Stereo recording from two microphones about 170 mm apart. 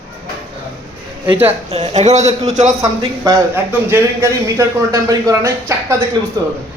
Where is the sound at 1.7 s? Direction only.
40° right (ahead or behind).